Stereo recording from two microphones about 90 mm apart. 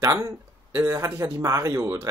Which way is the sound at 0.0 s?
30° right (ahead or behind).